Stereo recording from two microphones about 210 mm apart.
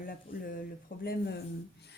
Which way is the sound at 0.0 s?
40° left (ahead or behind).